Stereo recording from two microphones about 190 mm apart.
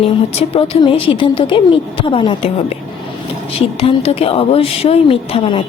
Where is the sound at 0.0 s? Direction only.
30° left (ahead or behind).